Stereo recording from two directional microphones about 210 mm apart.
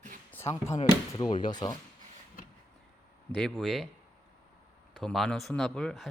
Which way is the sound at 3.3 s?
Centre (ahead or behind).